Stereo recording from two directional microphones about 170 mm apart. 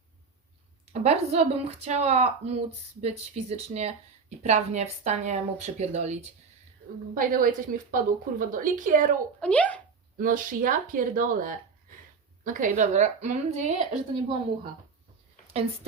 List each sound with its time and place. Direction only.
1.0 s speech: 35° right (ahead or behind)
7.1 s speech: 55° right (ahead or behind)
9.4 s a child's voice: 10° left (ahead or behind)
10.2 s speech: 55° right (ahead or behind)
15.5 s speech: 35° right (ahead or behind)